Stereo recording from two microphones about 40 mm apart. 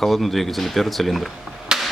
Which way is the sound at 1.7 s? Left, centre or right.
Centre.